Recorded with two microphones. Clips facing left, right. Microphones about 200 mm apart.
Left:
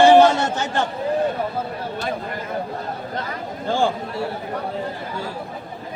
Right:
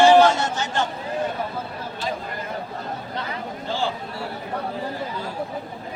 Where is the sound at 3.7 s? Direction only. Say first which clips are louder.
Left 6 dB; 50° left (ahead or behind).